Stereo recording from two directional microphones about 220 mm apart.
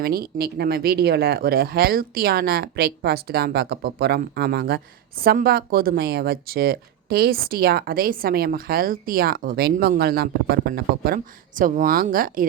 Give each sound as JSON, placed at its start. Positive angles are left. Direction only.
{"t": 0.0, "sound": "speech", "side_deg": -45}